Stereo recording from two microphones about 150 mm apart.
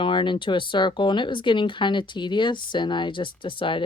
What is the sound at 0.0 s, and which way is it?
Speech, 35° left (ahead or behind).